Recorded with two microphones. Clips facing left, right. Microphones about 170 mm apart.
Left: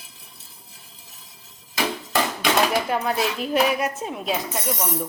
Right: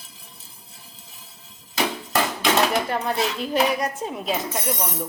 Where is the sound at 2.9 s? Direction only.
5° left (ahead or behind).